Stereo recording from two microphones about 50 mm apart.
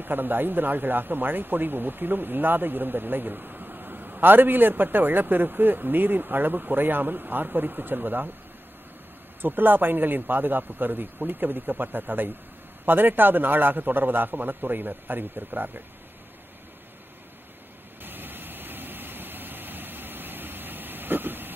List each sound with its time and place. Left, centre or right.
0.0 s speech: right
9.4 s speech: right
18.0 s vehicle: right